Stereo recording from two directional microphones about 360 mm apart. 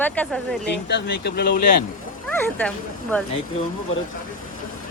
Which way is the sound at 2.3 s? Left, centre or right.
Centre.